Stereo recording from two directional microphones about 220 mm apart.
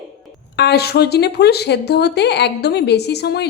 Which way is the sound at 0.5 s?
50° left (ahead or behind).